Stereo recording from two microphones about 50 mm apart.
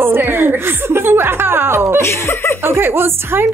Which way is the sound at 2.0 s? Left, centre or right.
Left.